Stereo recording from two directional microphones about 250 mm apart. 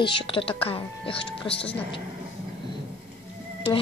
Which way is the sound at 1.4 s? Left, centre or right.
Centre.